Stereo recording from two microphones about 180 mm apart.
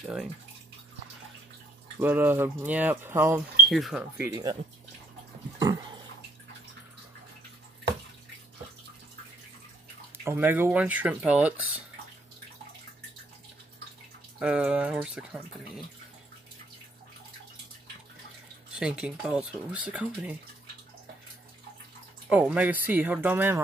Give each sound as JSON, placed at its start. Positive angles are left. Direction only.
{"t": 2.0, "sound": "speech", "side_deg": -10}
{"t": 3.6, "sound": "speech", "side_deg": 0}
{"t": 4.2, "sound": "speech", "side_deg": -20}
{"t": 5.6, "sound": "pig", "side_deg": -20}
{"t": 10.2, "sound": "speech", "side_deg": -10}
{"t": 14.4, "sound": "speech", "side_deg": -5}
{"t": 18.8, "sound": "speech", "side_deg": -5}
{"t": 22.3, "sound": "speech", "side_deg": -5}